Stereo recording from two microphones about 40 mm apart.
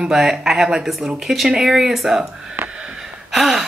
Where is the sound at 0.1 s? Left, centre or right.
Centre.